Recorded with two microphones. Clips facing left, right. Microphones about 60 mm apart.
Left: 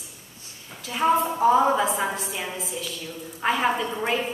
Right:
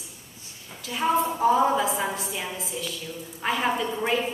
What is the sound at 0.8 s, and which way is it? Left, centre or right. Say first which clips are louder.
A woman's voice: left 2 dB; centre.